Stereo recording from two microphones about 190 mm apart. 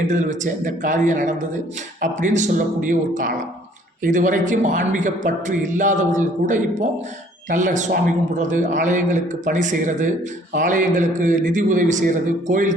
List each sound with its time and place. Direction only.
0.1 s a man's voice: 40° right (ahead or behind)